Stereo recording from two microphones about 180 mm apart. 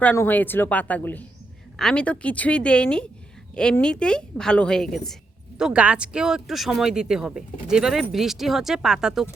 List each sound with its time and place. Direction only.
0.0 s a woman's voice: 10° left (ahead or behind)